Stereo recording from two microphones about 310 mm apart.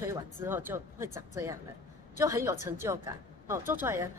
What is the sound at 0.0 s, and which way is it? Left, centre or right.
Speech, centre.